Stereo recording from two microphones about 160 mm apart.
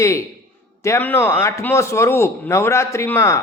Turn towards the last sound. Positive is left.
turn(degrees=15)  # may be behind; listen again after turning